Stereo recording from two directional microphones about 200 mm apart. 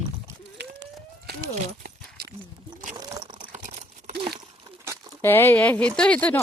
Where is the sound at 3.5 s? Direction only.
35° right (ahead or behind).